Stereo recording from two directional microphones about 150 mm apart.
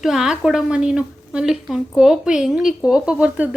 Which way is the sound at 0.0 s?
5° right (ahead or behind).